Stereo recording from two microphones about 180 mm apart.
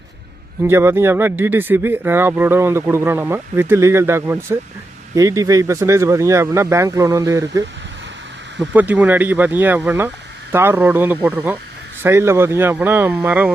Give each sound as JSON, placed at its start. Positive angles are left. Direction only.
{"t": 0.6, "sound": "speech", "side_deg": -15}